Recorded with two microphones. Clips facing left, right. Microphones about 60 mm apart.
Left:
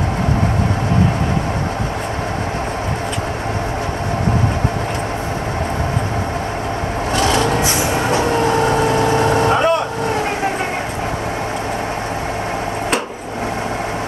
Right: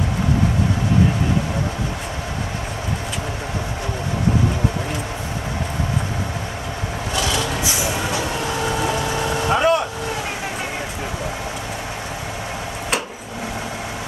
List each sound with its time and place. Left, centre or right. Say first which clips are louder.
7.2 s vehicle: left 7 dB; left
9.5 s vehicle: left 2 dB; centre